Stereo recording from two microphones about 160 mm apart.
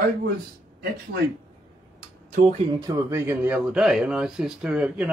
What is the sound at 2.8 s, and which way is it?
Speech, 20° right (ahead or behind).